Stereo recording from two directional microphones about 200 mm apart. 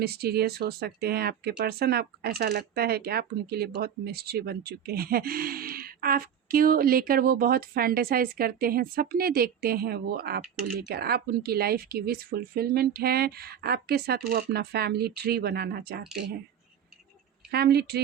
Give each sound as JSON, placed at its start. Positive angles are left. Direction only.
{"t": 0.0, "sound": "speech", "side_deg": -50}
{"t": 17.5, "sound": "speech", "side_deg": -50}